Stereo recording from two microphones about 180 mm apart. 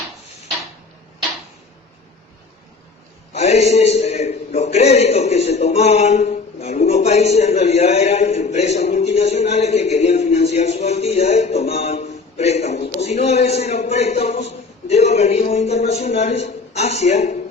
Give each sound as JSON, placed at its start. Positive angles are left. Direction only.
{"t": 3.3, "sound": "a man's voice", "side_deg": 40}